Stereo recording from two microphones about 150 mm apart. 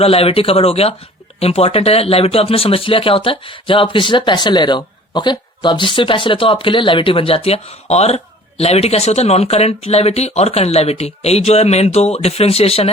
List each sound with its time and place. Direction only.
0.0 s speech: 40° left (ahead or behind)